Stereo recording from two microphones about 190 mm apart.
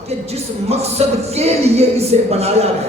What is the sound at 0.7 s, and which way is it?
Speech, 35° right (ahead or behind).